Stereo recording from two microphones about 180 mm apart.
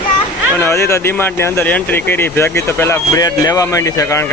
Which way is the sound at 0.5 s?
15° left (ahead or behind).